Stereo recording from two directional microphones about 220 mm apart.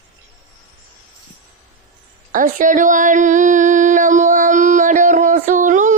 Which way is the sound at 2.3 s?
35° right (ahead or behind).